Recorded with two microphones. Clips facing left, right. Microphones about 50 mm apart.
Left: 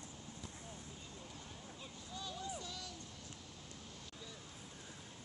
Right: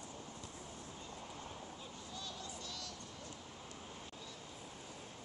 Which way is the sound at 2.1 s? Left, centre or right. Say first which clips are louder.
Left 4 dB; centre.